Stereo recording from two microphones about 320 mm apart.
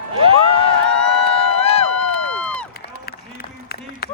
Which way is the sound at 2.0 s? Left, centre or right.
Right.